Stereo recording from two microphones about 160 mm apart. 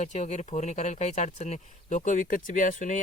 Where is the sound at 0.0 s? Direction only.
45° left (ahead or behind).